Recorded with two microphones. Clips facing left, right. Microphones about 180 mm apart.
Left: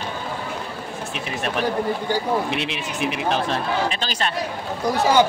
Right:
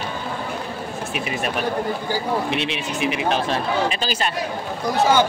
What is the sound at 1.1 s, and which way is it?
Speech, 5° right (ahead or behind).